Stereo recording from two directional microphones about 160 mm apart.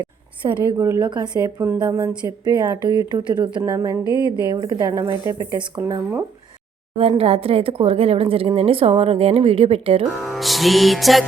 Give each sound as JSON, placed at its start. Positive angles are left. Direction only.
{"t": 0.0, "sound": "a woman's voice", "side_deg": -25}
{"t": 3.6, "sound": "a woman's voice", "side_deg": -20}
{"t": 4.0, "sound": "speech", "side_deg": 25}
{"t": 4.5, "sound": "a woman's voice", "side_deg": -25}
{"t": 7.2, "sound": "a woman's voice", "side_deg": -35}
{"t": 10.2, "sound": "music", "side_deg": 0}